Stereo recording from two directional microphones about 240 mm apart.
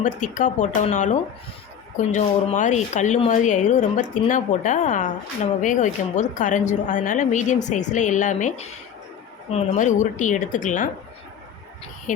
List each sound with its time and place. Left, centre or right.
0.0 s speech: left
12.1 s speech: left